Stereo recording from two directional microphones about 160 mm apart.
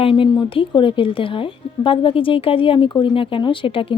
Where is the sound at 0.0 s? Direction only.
35° left (ahead or behind).